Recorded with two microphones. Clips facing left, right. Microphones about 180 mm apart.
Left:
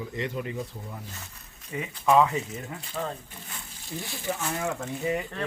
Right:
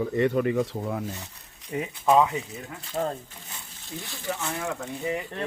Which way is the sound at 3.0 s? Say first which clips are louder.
Right 5 dB; 40° right (ahead or behind).